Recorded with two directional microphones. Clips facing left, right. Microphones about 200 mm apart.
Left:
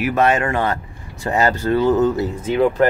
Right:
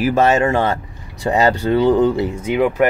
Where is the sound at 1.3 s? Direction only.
15° right (ahead or behind).